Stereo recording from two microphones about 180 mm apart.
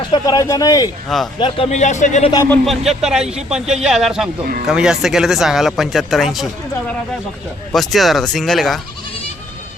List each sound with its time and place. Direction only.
0.1 s speech: 20° left (ahead or behind)
1.0 s speech: centre (ahead or behind)
1.4 s speech: 30° left (ahead or behind)
2.3 s speech: 15° left (ahead or behind)
2.6 s speech: centre (ahead or behind)
7.7 s speech: centre (ahead or behind)